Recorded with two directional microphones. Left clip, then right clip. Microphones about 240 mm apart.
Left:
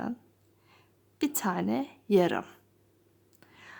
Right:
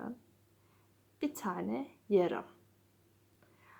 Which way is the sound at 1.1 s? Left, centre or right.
Left.